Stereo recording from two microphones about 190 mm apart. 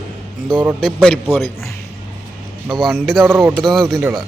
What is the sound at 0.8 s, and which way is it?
Speech, centre (ahead or behind).